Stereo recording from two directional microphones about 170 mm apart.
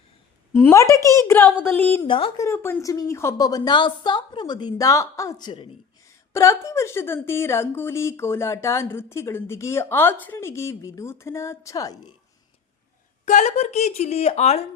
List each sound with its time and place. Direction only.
0.5 s a woman's voice: 15° left (ahead or behind)
2.0 s a woman's voice: 30° left (ahead or behind)
2.4 s a woman's voice: 15° left (ahead or behind)
6.3 s a woman's voice: 15° left (ahead or behind)
13.2 s a woman's voice: 45° left (ahead or behind)